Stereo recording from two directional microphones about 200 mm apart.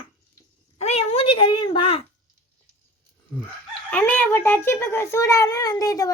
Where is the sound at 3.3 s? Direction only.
10° left (ahead or behind).